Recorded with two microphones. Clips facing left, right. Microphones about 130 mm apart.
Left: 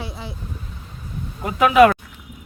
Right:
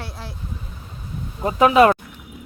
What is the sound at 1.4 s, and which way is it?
Speech, 30° right (ahead or behind).